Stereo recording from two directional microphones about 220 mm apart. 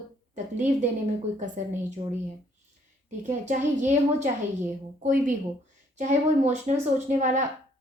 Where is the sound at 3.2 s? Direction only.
35° right (ahead or behind).